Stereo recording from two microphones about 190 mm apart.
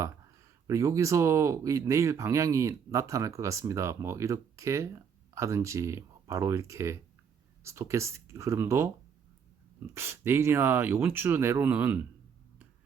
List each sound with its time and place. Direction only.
0.7 s speech: 15° right (ahead or behind)